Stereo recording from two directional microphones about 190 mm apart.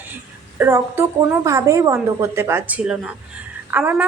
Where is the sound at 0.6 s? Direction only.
10° right (ahead or behind).